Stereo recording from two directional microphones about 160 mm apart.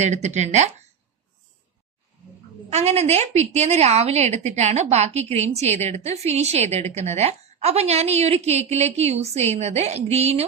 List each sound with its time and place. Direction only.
0.0 s speech: 45° right (ahead or behind)
2.6 s a woman's voice: 40° right (ahead or behind)